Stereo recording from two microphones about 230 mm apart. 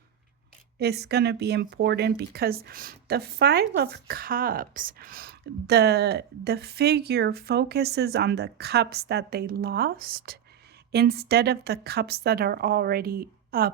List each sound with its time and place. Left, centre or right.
0.8 s speech: right